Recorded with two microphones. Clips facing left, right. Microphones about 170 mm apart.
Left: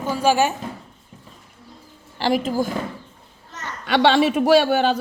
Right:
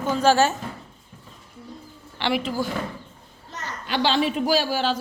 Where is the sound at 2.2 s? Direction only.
40° left (ahead or behind).